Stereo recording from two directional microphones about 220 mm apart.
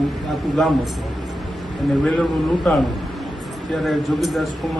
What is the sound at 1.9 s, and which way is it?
A man's voice, 5° left (ahead or behind).